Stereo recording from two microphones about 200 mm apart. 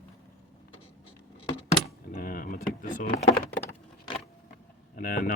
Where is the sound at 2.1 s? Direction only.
45° left (ahead or behind).